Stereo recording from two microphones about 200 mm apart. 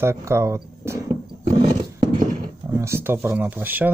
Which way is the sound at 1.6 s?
25° right (ahead or behind).